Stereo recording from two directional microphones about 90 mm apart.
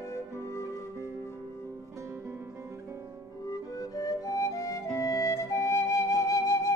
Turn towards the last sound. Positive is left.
turn(degrees=35)  # may be behind; listen again after turning